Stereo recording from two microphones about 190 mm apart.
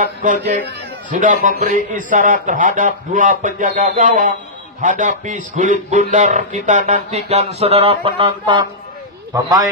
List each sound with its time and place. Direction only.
0.0 s a man's voice: 45° right (ahead or behind); by 9.7 s 20° right (ahead or behind)